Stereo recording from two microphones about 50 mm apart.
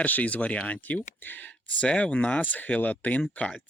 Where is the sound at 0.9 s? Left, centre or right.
Left.